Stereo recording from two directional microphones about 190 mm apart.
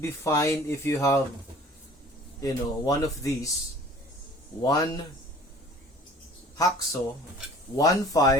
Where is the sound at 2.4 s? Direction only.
20° left (ahead or behind).